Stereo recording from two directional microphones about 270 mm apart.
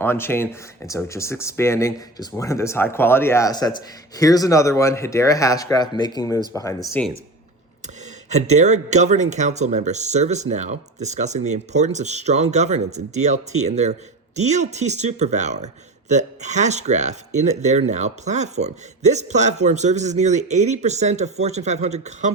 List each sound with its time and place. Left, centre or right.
0.0 s speech: centre
8.3 s speech: right